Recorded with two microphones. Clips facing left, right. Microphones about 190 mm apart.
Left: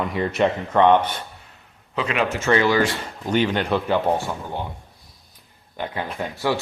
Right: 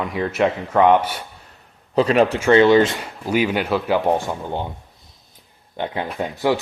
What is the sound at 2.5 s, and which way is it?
Speech, 25° right (ahead or behind).